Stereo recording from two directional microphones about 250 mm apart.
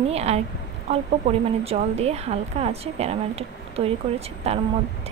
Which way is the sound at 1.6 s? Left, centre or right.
Right.